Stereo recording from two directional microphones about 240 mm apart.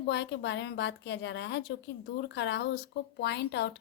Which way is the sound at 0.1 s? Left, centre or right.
Left.